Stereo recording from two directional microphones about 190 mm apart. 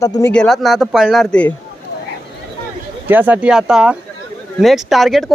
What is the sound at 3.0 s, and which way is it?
Speech, 10° right (ahead or behind).